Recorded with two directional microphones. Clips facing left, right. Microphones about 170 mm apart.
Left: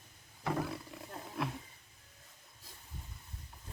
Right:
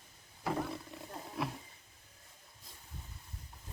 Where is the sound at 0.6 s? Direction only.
Centre (ahead or behind).